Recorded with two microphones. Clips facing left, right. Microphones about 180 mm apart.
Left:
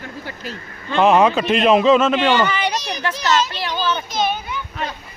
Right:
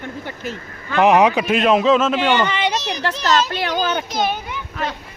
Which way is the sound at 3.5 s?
55° right (ahead or behind).